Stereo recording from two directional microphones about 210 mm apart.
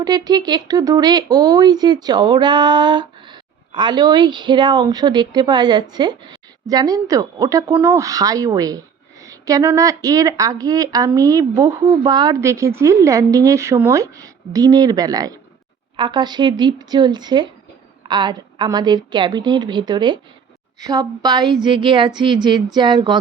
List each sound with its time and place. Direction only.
0.0 s a woman's voice: 20° right (ahead or behind)